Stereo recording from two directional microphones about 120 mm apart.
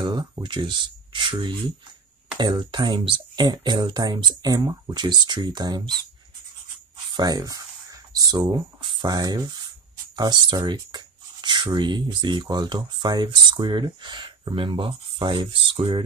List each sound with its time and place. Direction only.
0.0 s speech: 35° right (ahead or behind)
7.2 s speech: 35° right (ahead or behind); by 16.0 s 50° right (ahead or behind)